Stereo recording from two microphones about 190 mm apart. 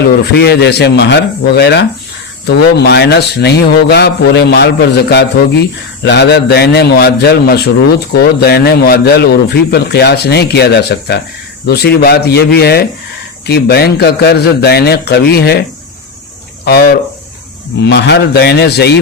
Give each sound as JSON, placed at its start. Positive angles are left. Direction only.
{"t": 0.3, "sound": "a man's voice", "side_deg": 60}
{"t": 16.6, "sound": "a man's voice", "side_deg": 55}